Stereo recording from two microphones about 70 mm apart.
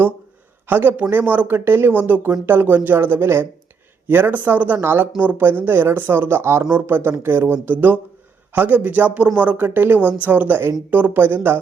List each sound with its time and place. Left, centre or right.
0.7 s speech: right
4.1 s speech: right